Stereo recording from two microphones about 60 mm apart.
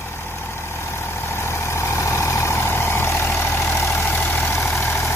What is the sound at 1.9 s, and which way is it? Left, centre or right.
Vehicle, left.